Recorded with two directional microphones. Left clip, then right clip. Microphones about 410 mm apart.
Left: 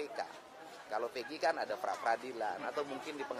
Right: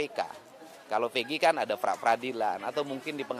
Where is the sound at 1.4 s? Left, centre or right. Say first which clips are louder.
Right 8 dB; right.